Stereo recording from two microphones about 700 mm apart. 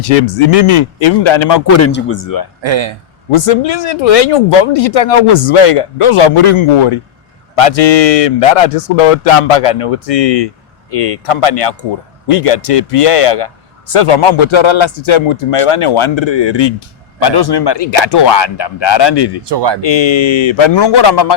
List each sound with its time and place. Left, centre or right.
0.5 s a man's voice: left
1.8 s speech: centre
2.2 s speech: left
2.6 s speech: right
3.3 s a man's voice: left
19.5 s speech: right
19.8 s a man's voice: left